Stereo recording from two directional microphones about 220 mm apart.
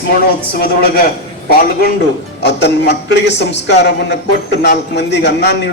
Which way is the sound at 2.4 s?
50° left (ahead or behind).